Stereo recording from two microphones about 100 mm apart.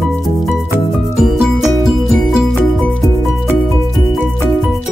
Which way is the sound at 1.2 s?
Centre (ahead or behind).